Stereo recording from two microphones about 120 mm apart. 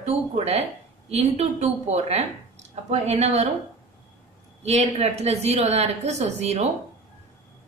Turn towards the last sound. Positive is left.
turn(degrees=-65)  # may be behind; listen again after turning